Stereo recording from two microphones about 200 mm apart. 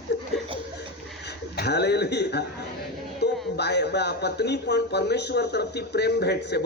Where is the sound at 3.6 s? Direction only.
55° left (ahead or behind).